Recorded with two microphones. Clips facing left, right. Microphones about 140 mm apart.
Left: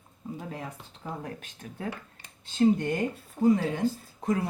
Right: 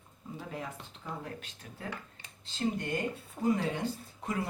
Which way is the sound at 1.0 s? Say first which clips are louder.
Left 4 dB; 50° left (ahead or behind).